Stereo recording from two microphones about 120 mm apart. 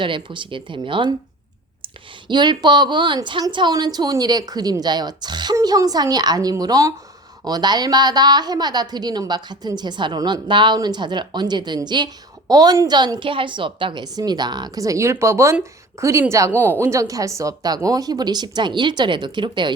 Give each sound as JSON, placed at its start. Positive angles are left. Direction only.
{"t": 0.0, "sound": "speech", "side_deg": -45}
{"t": 2.2, "sound": "a woman's voice", "side_deg": -40}